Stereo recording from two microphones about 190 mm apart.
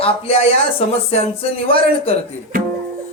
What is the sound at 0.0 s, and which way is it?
Speech, 30° left (ahead or behind).